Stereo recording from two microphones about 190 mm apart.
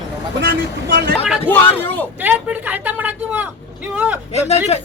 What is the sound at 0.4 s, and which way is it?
Speech, 55° right (ahead or behind).